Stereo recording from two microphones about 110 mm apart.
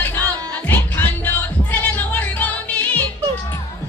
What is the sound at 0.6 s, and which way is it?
Music, 15° left (ahead or behind).